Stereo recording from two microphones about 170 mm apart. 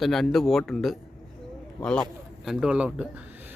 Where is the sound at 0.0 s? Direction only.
Centre (ahead or behind).